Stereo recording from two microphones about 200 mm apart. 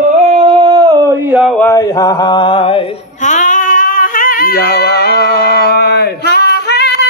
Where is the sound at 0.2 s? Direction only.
30° right (ahead or behind); by 1.5 s 10° right (ahead or behind).